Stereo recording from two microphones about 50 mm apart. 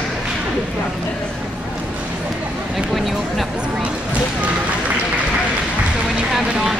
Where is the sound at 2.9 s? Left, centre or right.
Centre.